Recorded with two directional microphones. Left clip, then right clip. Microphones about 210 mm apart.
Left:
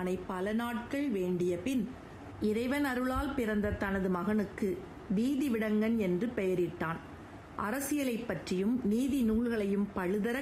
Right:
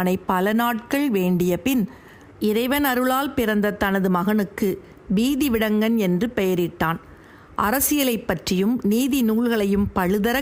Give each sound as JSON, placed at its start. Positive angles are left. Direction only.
{"t": 0.0, "sound": "a woman's voice", "side_deg": -50}
{"t": 2.4, "sound": "a woman's voice", "side_deg": -35}